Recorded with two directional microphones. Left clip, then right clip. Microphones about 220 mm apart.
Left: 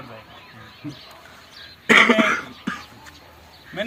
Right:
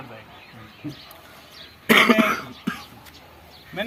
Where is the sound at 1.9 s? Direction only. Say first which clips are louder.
Left 2 dB; 50° right (ahead or behind).